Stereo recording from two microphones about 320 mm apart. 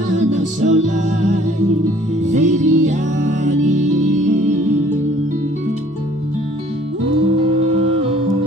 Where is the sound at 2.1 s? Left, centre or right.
Right.